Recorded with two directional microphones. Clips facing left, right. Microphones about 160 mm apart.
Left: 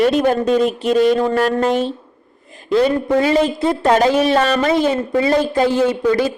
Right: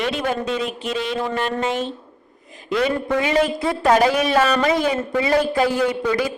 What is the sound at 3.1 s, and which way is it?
Speech, 35° left (ahead or behind).